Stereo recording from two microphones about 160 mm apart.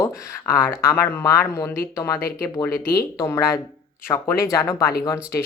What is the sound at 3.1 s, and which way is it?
Speech, 20° left (ahead or behind).